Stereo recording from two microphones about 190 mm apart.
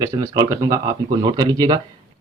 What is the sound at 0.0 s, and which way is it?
Speech, 15° right (ahead or behind).